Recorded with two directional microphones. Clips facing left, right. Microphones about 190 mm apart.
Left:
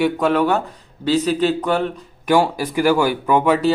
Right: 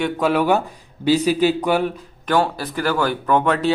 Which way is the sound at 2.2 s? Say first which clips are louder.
Left 3 dB; 10° left (ahead or behind).